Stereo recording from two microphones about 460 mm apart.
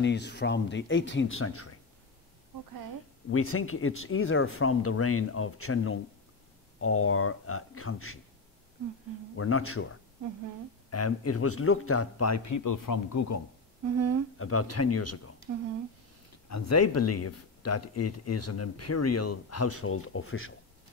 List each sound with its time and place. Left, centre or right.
0.0 s speech: left
3.3 s speech: left
9.4 s speech: left
10.9 s speech: left
13.8 s speech: right
14.4 s speech: left
16.4 s speech: left